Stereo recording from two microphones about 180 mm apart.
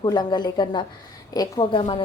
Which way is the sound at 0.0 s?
25° left (ahead or behind).